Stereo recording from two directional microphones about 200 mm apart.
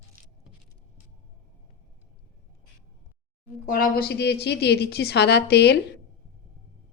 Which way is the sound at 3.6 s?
45° left (ahead or behind).